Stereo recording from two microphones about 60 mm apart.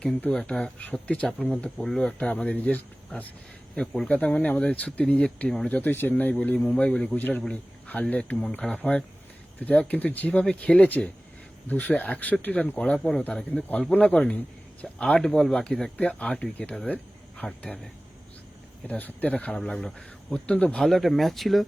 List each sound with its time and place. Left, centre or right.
0.2 s speech: centre
1.3 s speech: centre; by 6.6 s left
6.7 s speech: centre
7.2 s a man's voice: left; by 8.9 s centre
9.6 s speech: left
12.7 s speech: centre
13.5 s speech: left
15.4 s speech: centre
18.9 s speech: left
20.7 s speech: centre